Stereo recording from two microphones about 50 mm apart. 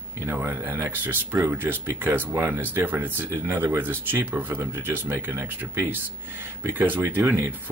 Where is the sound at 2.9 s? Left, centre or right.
Right.